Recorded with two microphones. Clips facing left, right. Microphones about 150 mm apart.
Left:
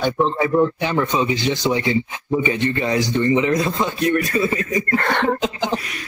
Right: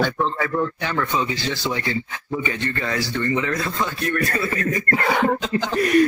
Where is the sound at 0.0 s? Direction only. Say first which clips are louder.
Left 3 dB; 20° left (ahead or behind).